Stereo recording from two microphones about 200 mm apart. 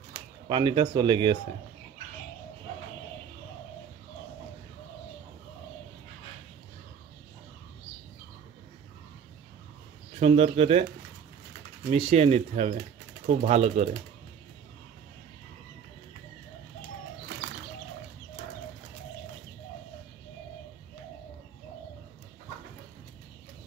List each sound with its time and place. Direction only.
0.5 s speech: 25° right (ahead or behind)
10.1 s speech: 35° right (ahead or behind)
11.9 s speech: 30° right (ahead or behind)